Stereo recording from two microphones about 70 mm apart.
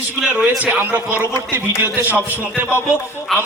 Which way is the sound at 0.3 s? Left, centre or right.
Right.